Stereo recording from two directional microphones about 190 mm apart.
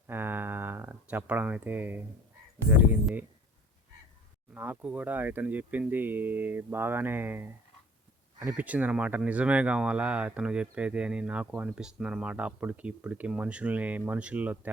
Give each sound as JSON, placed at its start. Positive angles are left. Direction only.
{"t": 0.1, "sound": "a sound", "side_deg": -10}
{"t": 2.6, "sound": "speech", "side_deg": -10}
{"t": 4.5, "sound": "speech", "side_deg": -10}